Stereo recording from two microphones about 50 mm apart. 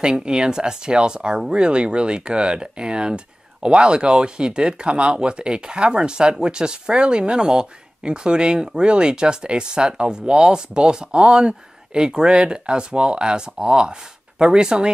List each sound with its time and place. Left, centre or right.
0.0 s speech: centre